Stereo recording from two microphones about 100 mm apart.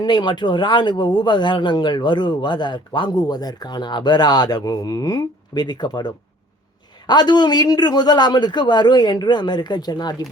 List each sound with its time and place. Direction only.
0.0 s speech: 50° left (ahead or behind)